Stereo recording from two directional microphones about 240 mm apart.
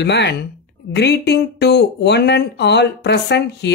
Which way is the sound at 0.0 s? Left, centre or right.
Left.